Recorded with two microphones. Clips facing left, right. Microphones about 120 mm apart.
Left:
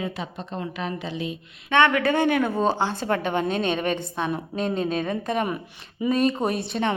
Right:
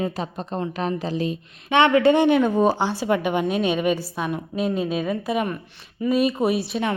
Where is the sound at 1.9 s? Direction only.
25° right (ahead or behind); by 5.4 s 5° right (ahead or behind).